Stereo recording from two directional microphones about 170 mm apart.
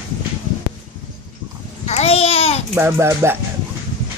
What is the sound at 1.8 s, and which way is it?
Babbling, 40° left (ahead or behind).